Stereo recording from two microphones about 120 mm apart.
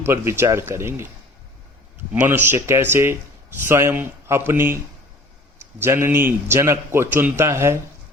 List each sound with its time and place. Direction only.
0.0 s a man's voice: 20° right (ahead or behind)
2.2 s a man's voice: 15° right (ahead or behind)
5.8 s a man's voice: 20° right (ahead or behind)